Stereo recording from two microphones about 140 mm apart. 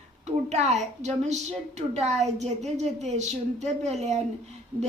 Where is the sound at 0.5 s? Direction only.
55° right (ahead or behind).